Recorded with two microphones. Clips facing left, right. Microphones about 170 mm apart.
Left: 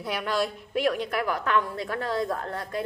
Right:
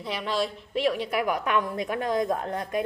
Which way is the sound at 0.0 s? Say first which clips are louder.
Left 1 dB; centre (ahead or behind).